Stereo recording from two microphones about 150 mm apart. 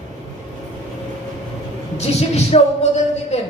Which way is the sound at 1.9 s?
45° left (ahead or behind).